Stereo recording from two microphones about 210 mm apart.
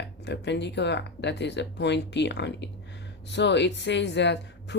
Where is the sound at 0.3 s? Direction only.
55° left (ahead or behind).